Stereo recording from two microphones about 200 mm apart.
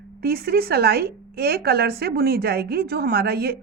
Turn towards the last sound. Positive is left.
turn(degrees=-50)  # may be behind; listen again after turning